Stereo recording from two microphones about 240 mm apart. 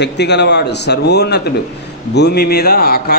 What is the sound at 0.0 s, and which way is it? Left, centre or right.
Speech, left.